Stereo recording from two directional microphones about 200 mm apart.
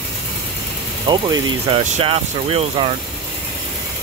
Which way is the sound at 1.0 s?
25° right (ahead or behind).